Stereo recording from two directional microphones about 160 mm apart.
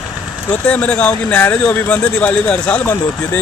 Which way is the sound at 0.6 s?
10° left (ahead or behind).